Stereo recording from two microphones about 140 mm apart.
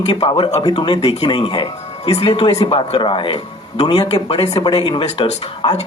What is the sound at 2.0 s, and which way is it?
Speech, 50° left (ahead or behind).